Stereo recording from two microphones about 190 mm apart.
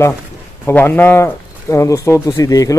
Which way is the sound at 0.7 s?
10° left (ahead or behind).